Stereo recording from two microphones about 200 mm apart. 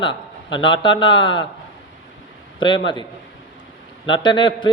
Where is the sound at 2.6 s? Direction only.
25° left (ahead or behind).